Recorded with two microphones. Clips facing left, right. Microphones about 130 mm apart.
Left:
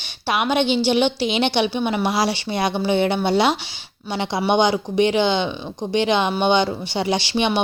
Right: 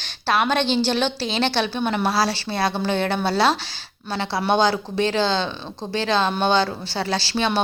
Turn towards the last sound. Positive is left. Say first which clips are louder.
# left 3 dB
turn(degrees=20)  # may be behind; listen again after turning